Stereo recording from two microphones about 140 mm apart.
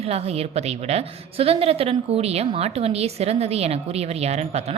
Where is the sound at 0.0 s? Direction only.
45° right (ahead or behind).